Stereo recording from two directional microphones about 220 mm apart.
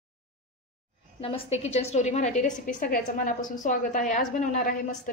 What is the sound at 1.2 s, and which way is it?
A woman's voice, 25° left (ahead or behind).